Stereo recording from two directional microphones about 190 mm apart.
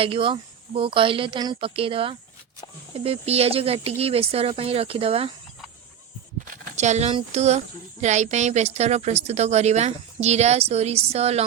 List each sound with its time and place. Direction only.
0.0 s a woman's voice: 30° right (ahead or behind)
6.7 s a woman's voice: 35° right (ahead or behind)